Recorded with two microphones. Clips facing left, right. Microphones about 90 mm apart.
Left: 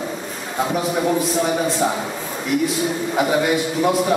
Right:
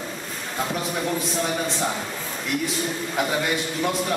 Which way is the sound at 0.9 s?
5° left (ahead or behind).